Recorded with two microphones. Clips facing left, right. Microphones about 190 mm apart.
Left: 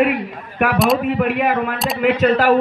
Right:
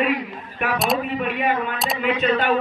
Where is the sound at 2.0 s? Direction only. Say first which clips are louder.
Left 6 dB; 80° left.